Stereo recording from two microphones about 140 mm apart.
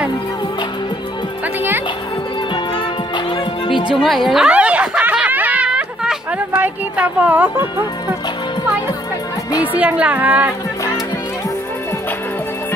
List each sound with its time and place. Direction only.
3.6 s music: 40° left (ahead or behind)
3.9 s snicker: centre (ahead or behind)
9.8 s a woman's voice: 10° right (ahead or behind)